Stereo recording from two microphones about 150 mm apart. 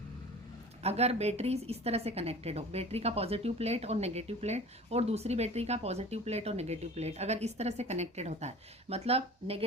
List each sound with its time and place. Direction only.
0.8 s a woman's voice: 45° right (ahead or behind)